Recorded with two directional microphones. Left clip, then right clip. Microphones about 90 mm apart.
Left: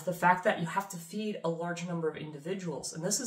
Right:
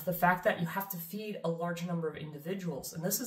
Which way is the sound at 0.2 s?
30° left (ahead or behind).